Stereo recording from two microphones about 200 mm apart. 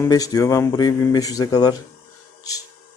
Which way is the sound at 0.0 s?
20° left (ahead or behind).